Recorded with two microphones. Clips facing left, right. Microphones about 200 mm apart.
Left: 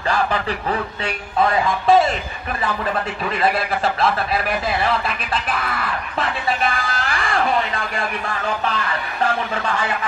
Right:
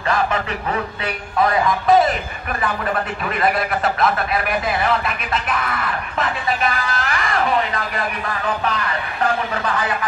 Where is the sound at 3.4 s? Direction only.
30° left (ahead or behind).